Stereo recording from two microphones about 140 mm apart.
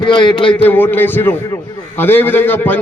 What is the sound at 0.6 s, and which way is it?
A man's voice, 15° left (ahead or behind).